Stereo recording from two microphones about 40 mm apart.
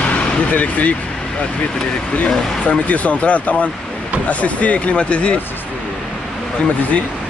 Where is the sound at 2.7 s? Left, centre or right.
Left.